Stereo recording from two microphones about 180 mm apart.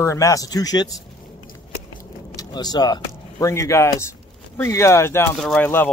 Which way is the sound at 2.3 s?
20° left (ahead or behind).